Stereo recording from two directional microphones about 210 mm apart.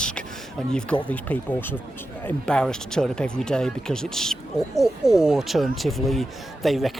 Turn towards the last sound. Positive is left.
turn(degrees=0)  # may be behind; listen again after turning